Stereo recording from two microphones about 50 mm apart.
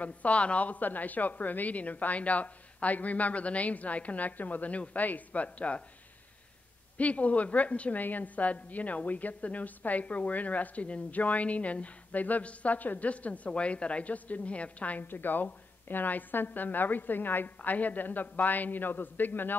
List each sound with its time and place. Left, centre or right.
0.0 s a woman's voice: left
7.0 s a woman's voice: left